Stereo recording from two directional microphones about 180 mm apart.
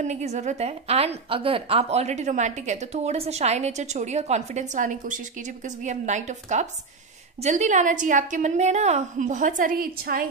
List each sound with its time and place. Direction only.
0.0 s a woman's voice: 40° right (ahead or behind); by 10.2 s 55° right (ahead or behind)